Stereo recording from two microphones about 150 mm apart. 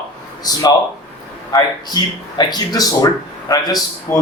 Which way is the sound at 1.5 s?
30° left (ahead or behind).